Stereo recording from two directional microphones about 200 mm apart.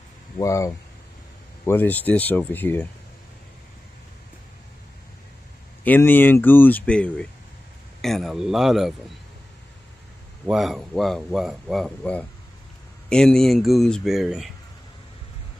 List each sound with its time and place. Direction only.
0.4 s speech: 15° left (ahead or behind)
5.9 s speech: 10° left (ahead or behind)
10.4 s speech: centre (ahead or behind)